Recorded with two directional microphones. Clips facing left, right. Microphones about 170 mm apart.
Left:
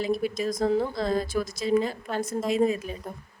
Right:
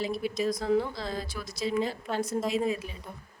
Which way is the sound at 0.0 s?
50° left (ahead or behind).